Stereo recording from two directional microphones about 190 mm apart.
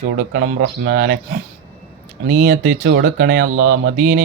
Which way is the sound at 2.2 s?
55° right (ahead or behind).